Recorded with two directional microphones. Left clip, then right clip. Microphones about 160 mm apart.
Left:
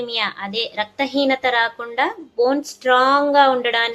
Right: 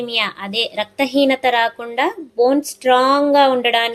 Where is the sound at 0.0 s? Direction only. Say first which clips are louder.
Right 2 dB; 30° right (ahead or behind).